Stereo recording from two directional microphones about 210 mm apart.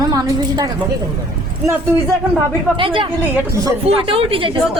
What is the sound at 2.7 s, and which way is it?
Speech, 25° right (ahead or behind).